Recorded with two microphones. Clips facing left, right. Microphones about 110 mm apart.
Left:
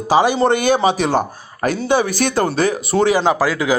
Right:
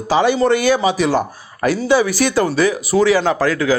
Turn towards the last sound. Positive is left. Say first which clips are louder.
# even
turn(degrees=15)  # may be behind; listen again after turning